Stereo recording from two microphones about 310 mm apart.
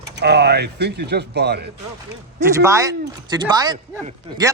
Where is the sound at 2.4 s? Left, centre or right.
Centre.